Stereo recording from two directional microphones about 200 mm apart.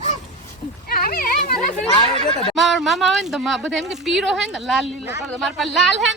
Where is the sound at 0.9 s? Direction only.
50° left (ahead or behind).